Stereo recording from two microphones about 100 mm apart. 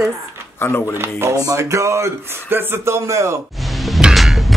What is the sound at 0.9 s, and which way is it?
Speech, 25° right (ahead or behind).